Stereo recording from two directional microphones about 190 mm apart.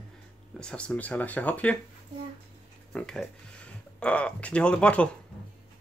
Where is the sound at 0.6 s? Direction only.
5° left (ahead or behind).